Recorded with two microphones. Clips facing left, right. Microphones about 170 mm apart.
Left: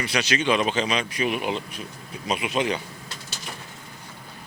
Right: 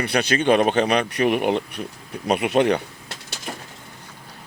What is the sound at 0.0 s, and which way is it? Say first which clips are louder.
Speech: right 4 dB; 55° right (ahead or behind).